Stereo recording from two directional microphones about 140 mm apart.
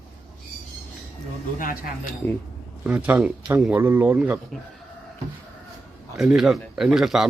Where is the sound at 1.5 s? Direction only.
85° left.